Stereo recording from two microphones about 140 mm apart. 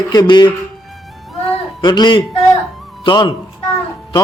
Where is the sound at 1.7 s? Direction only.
30° left (ahead or behind).